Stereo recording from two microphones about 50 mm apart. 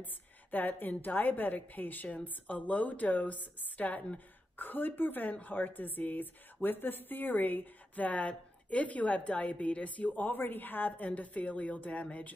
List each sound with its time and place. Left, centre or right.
0.0 s a woman's voice: left